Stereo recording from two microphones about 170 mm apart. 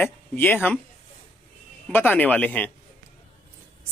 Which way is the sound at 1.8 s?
10° left (ahead or behind).